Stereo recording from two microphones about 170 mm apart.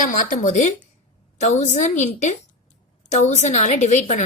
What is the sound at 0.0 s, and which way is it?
Speech, 50° left (ahead or behind).